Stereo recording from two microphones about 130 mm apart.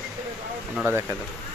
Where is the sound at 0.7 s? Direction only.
20° right (ahead or behind).